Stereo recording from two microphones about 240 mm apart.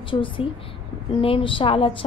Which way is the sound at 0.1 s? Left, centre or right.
Left.